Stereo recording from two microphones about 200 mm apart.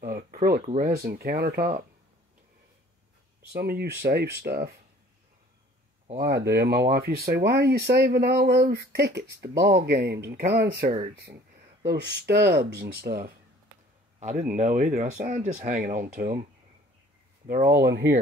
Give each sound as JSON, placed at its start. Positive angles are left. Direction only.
{"t": 0.0, "sound": "a sound", "side_deg": -45}
{"t": 0.7, "sound": "speech", "side_deg": -50}
{"t": 3.5, "sound": "speech", "side_deg": -50}
{"t": 6.1, "sound": "speech", "side_deg": -55}
{"t": 17.7, "sound": "speech", "side_deg": -55}